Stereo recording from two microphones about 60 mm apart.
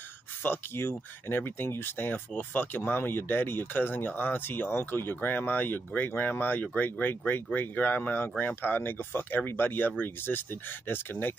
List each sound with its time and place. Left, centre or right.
0.4 s speech: left